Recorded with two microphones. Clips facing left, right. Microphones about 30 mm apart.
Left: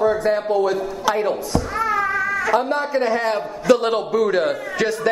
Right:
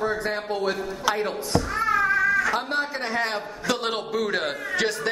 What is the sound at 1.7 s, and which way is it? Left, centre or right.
Cat, centre.